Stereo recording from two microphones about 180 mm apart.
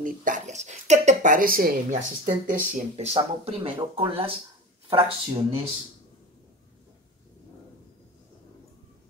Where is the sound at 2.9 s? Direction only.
35° right (ahead or behind).